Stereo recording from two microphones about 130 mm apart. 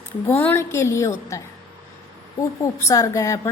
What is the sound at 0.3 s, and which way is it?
Speech, 15° left (ahead or behind).